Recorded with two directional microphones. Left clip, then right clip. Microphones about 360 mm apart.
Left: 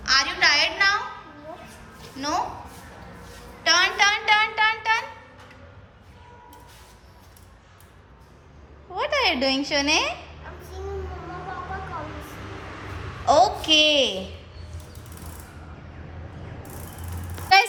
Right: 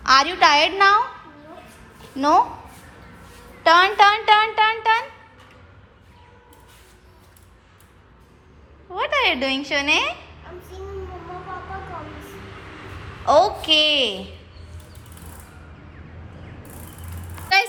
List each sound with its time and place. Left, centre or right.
0.0 s speech: centre
1.6 s a sound: centre
3.6 s speech: centre
8.9 s speech: centre
13.2 s speech: centre